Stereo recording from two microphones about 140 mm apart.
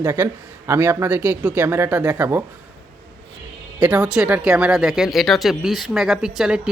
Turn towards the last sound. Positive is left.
turn(degrees=-5)  # may be behind; listen again after turning